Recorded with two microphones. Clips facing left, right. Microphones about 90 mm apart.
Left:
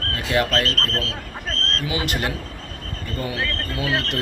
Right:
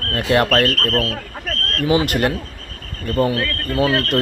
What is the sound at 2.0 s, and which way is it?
Speech, 55° right (ahead or behind).